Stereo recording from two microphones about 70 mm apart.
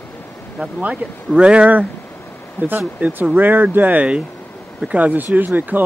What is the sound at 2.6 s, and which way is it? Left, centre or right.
Speech, left.